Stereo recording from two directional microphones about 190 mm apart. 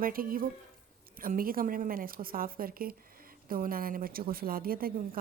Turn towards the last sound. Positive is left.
turn(degrees=-50)  # may be behind; listen again after turning